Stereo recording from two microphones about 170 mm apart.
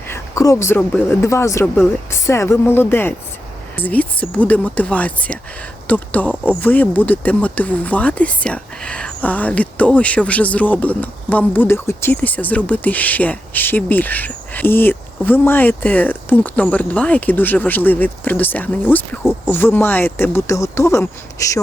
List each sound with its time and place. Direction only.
0.1 s speech: 15° left (ahead or behind)